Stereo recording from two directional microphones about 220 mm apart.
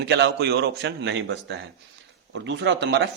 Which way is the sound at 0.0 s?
50° right (ahead or behind).